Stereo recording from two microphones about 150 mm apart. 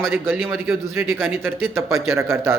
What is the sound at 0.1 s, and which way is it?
A man's voice, 15° right (ahead or behind).